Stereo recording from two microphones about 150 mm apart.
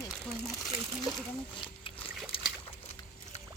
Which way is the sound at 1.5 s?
35° left (ahead or behind).